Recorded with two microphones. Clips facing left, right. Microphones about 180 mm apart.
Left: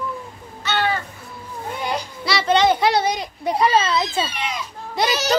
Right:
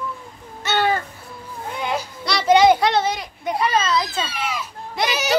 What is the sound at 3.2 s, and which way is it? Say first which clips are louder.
Speech: left 3 dB; 30° left (ahead or behind).